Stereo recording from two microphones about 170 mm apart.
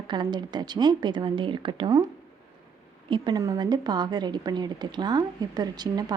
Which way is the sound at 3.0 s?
25° right (ahead or behind).